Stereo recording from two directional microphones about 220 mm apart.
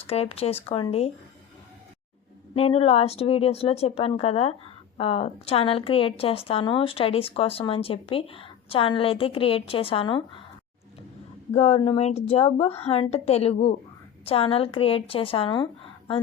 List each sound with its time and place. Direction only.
0.0 s a woman's voice: 25° left (ahead or behind)
2.6 s a woman's voice: 25° left (ahead or behind)
11.5 s a woman's voice: 30° left (ahead or behind)